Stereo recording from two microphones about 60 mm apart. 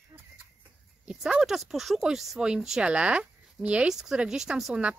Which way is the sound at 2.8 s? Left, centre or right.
Centre.